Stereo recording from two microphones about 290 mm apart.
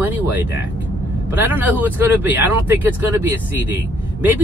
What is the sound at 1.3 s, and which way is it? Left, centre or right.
Speech, centre.